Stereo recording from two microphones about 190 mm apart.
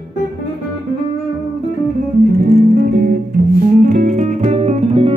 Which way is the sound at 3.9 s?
35° right (ahead or behind).